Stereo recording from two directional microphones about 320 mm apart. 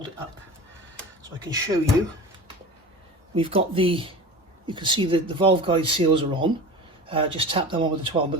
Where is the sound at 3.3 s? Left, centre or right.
Centre.